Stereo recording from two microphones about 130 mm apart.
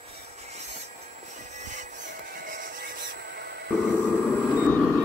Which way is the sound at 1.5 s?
70° right (ahead or behind).